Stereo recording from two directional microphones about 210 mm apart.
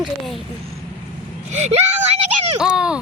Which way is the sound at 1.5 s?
30° right (ahead or behind).